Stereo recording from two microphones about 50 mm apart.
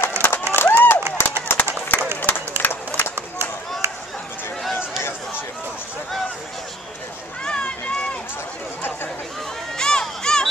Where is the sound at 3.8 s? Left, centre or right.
Right.